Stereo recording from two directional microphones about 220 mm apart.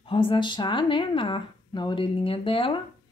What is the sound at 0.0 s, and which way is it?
Speech, 25° left (ahead or behind).